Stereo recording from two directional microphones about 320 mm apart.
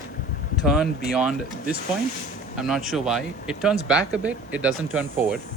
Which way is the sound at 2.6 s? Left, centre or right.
Centre.